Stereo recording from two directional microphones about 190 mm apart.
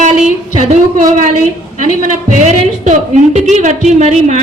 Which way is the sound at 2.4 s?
40° right (ahead or behind).